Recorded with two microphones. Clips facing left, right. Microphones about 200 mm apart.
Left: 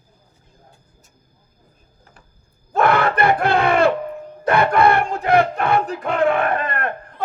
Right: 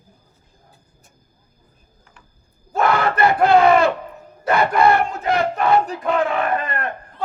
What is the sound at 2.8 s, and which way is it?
Speech, 60° left (ahead or behind).